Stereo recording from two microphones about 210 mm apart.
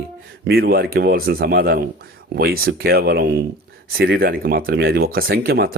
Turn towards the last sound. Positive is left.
turn(degrees=-50)  # may be behind; listen again after turning